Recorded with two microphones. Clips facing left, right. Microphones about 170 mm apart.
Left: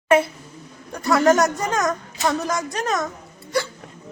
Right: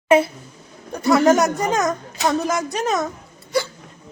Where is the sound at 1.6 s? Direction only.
15° right (ahead or behind).